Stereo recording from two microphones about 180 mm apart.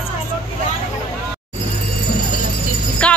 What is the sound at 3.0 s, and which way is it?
Speech, 5° left (ahead or behind).